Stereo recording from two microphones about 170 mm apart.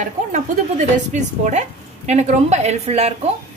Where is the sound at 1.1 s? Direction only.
45° right (ahead or behind).